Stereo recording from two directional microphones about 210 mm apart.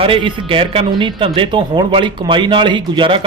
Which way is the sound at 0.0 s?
25° right (ahead or behind).